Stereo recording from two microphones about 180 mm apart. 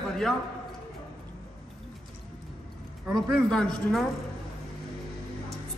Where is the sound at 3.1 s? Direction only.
Centre (ahead or behind).